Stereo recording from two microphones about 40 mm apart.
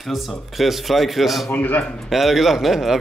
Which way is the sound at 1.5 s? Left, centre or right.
Left.